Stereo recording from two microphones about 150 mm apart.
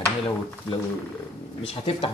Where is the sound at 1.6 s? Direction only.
40° left (ahead or behind).